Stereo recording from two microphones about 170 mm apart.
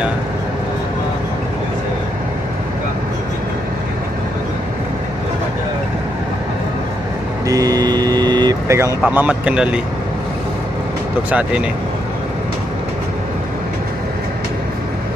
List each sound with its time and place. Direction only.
7.4 s vehicle: 20° right (ahead or behind)
11.2 s speech: 10° right (ahead or behind)